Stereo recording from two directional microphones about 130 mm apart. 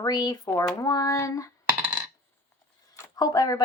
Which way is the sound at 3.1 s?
30° left (ahead or behind).